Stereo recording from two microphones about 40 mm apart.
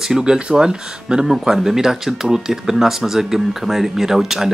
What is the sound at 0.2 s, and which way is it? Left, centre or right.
Speech, right.